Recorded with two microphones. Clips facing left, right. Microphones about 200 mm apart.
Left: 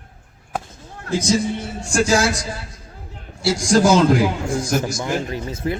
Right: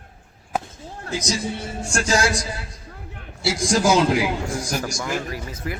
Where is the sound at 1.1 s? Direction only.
30° left (ahead or behind).